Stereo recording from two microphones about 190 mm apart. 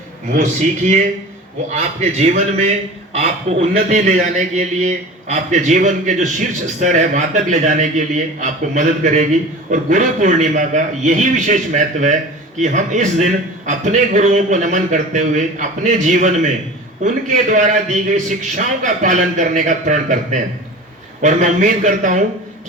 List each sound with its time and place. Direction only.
0.3 s a man's voice: 40° right (ahead or behind)